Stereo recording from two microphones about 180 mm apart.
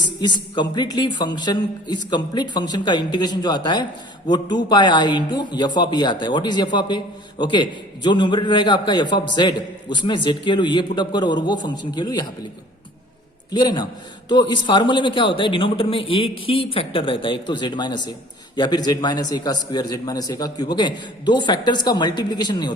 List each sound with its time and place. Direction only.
0.2 s a man's voice: 25° left (ahead or behind)
13.5 s a man's voice: 25° left (ahead or behind)